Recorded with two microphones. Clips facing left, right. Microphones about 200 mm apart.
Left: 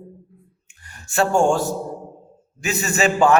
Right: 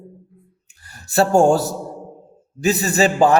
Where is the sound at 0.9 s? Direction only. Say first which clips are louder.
Right 3 dB; 35° right (ahead or behind).